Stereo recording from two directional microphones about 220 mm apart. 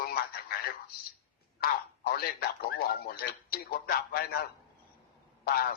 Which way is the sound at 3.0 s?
45° left (ahead or behind).